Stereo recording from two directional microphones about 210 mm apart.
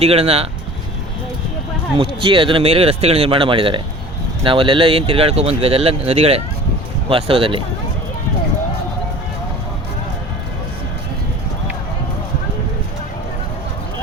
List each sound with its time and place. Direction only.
0.0 s speech: 30° right (ahead or behind)
2.0 s speech: 25° right (ahead or behind)